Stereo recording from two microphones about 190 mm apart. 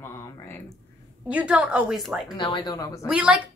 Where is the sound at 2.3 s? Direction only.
25° left (ahead or behind).